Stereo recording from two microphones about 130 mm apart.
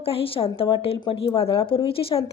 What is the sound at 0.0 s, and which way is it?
A woman's voice, 45° left (ahead or behind).